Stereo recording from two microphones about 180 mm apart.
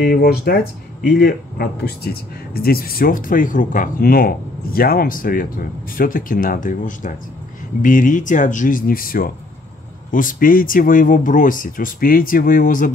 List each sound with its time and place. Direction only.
0.0 s speech: 60° left (ahead or behind)